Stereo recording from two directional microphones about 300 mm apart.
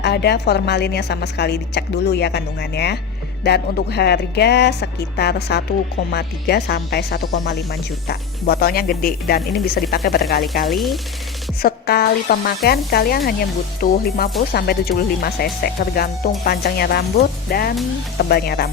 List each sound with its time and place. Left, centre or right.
0.0 s speech: left
10.7 s speech: centre
11.6 s speech: left